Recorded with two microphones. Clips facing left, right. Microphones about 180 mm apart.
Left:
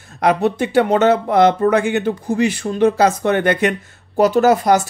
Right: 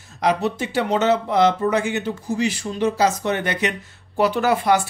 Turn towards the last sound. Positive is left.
turn(degrees=40)  # may be behind; listen again after turning